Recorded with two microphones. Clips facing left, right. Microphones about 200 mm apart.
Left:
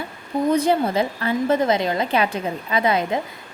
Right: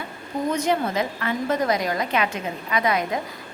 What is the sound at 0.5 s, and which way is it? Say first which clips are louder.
A woman's voice: left 4 dB; 30° left (ahead or behind).